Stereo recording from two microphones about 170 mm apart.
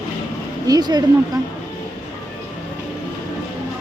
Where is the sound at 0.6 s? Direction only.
25° right (ahead or behind).